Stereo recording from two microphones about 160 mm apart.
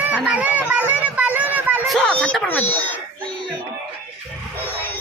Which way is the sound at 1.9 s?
5° left (ahead or behind).